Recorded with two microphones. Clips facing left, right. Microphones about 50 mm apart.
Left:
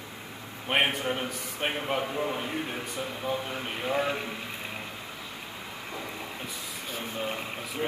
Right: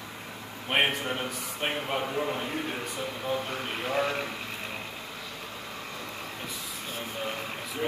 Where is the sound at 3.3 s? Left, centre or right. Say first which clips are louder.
Right 1 dB; centre.